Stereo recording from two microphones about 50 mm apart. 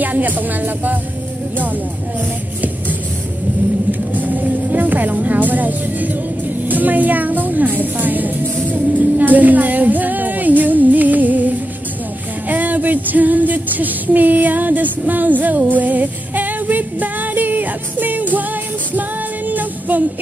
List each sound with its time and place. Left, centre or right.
0.0 s music: right
4.1 s vehicle: right
6.7 s music: right
18.9 s female singing: right